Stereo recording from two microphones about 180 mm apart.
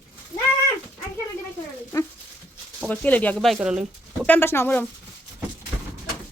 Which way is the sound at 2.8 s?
10° left (ahead or behind).